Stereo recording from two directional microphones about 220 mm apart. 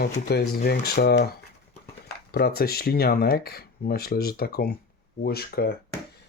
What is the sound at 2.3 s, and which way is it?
Speech, 45° left (ahead or behind).